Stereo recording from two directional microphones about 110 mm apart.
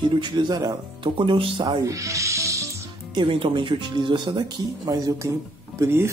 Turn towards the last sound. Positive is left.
turn(degrees=-25)  # may be behind; listen again after turning